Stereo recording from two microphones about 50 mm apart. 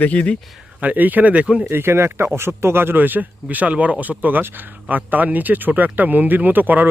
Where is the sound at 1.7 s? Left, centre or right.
Right.